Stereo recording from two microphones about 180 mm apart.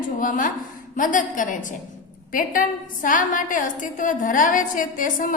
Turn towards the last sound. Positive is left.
turn(degrees=50)  # may be behind; listen again after turning